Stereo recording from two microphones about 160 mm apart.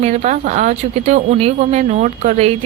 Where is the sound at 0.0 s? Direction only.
50° right (ahead or behind).